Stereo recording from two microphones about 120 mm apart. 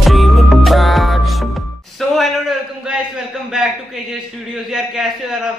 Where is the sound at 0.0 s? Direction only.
Centre (ahead or behind).